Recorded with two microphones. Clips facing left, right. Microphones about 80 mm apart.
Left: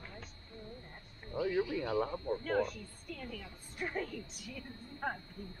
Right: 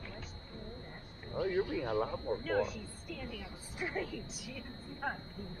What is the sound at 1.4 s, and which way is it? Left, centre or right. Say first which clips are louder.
Speech: even; right.